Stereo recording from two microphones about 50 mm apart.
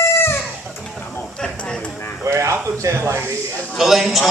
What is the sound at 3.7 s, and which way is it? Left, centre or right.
Speech, centre.